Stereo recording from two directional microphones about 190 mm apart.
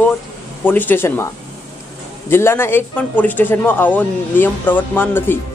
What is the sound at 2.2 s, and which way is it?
Speech, 10° left (ahead or behind).